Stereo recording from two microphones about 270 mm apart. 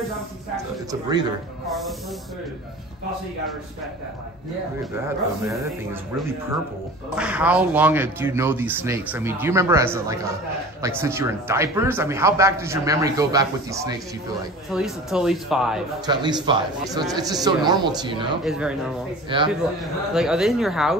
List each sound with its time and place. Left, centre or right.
1.7 s speech: centre
5.0 s speech: centre
7.2 s speech: centre
16.1 s speech: centre
18.4 s speech: centre
19.2 s speech: centre
19.5 s speech: centre